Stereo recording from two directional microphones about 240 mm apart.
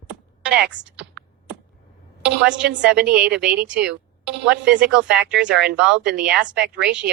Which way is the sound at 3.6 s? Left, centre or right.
Centre.